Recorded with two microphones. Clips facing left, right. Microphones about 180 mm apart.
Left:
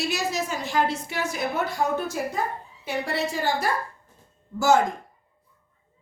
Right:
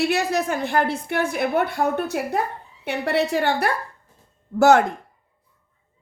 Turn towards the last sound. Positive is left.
turn(degrees=-65)  # may be behind; listen again after turning